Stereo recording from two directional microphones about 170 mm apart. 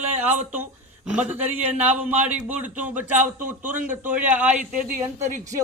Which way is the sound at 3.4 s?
50° right (ahead or behind).